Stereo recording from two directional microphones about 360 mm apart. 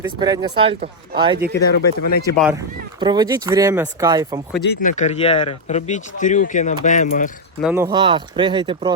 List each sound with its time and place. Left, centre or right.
0.0 s speech: centre
1.5 s speech: left
2.3 s speech: centre
4.6 s speech: left
7.6 s speech: centre